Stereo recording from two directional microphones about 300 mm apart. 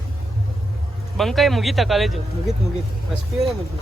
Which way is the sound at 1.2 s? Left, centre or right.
Centre.